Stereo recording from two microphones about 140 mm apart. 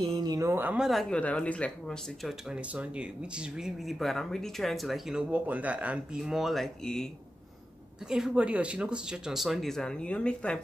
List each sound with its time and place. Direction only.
0.2 s speech: 25° right (ahead or behind)
0.8 s speech: 5° left (ahead or behind)
8.1 s speech: 5° right (ahead or behind)